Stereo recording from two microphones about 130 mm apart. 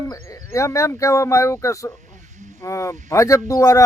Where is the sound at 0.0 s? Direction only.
25° left (ahead or behind).